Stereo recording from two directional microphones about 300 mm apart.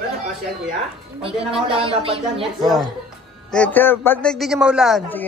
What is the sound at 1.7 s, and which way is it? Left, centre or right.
Speech, centre.